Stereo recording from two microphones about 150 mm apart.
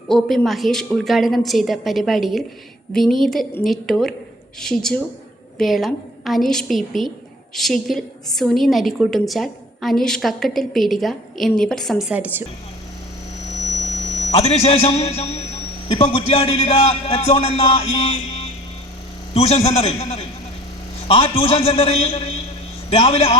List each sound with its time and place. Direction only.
0.1 s a woman's voice: centre (ahead or behind)
14.2 s a man's voice: 45° left (ahead or behind)
17.6 s music: 40° left (ahead or behind)
19.3 s a man's voice: 45° left (ahead or behind)